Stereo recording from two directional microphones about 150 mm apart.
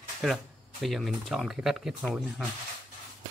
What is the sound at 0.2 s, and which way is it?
Speech, centre (ahead or behind).